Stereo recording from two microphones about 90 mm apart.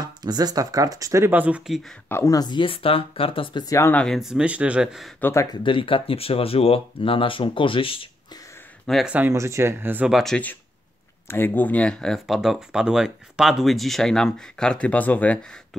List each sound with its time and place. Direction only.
0.0 s speech: 50° right (ahead or behind)
1.3 s speech: 20° right (ahead or behind)
2.0 s speech: 30° left (ahead or behind)
2.3 s speech: 55° left (ahead or behind)
2.6 s speech: 90° left; by 3.6 s 75° left (ahead or behind)
3.9 s speech: 10° left (ahead or behind)
4.2 s speech: 10° right (ahead or behind)
5.5 s speech: 65° left (ahead or behind); by 8.1 s 85° left
9.0 s speech: 15° right (ahead or behind)
9.3 s speech: 35° right (ahead or behind)
10.0 s speech: 5° right (ahead or behind)
10.3 s speech: 20° left (ahead or behind)
12.4 s speech: 5° right (ahead or behind); by 15.4 s 15° left (ahead or behind)